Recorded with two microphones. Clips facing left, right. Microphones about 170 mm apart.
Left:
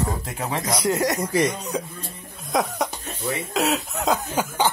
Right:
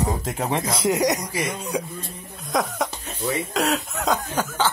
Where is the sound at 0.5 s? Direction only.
25° right (ahead or behind).